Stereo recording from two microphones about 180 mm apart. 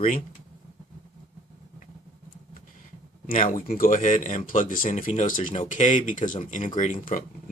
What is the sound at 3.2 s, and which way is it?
Speech, 45° left (ahead or behind).